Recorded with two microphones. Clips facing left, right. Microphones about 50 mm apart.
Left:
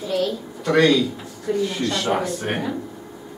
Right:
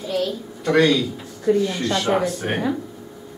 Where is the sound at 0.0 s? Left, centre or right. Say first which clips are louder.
Left 1 dB; centre.